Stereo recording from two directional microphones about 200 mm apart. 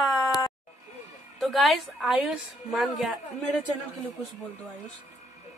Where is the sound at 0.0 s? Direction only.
Centre (ahead or behind).